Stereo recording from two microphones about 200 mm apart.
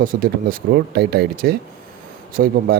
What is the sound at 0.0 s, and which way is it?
Speech, 45° right (ahead or behind).